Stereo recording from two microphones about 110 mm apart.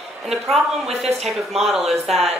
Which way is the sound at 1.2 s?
Centre (ahead or behind).